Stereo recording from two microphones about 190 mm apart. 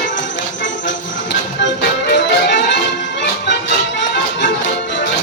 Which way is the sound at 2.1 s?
65° left (ahead or behind).